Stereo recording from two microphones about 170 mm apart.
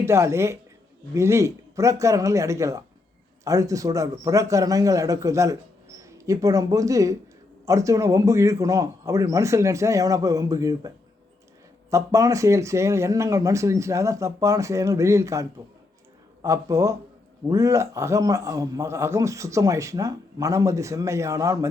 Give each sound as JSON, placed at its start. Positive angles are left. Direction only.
{"t": 0.0, "sound": "a man's voice", "side_deg": -15}